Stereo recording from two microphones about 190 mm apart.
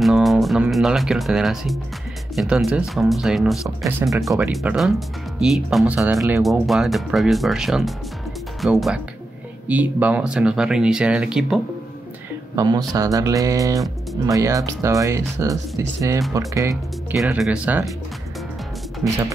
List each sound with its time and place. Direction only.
0.0 s speech: centre (ahead or behind)
12.5 s speech: 20° right (ahead or behind)
17.2 s speech: 5° right (ahead or behind)